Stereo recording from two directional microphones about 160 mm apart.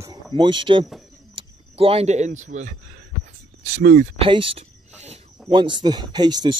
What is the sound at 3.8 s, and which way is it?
Speech, 60° right (ahead or behind).